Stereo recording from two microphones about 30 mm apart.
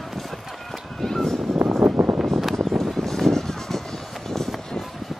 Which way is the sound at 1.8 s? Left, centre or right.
Centre.